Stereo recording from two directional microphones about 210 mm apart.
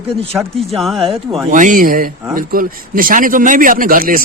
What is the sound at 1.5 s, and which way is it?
A man's voice, 40° right (ahead or behind).